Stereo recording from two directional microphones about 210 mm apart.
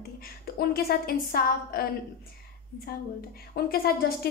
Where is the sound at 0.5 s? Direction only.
45° left (ahead or behind).